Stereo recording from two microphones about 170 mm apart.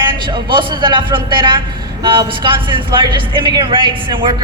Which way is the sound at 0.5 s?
25° right (ahead or behind).